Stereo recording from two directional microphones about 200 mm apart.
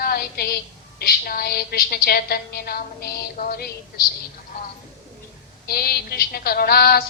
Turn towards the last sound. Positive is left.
turn(degrees=50)  # may be behind; listen again after turning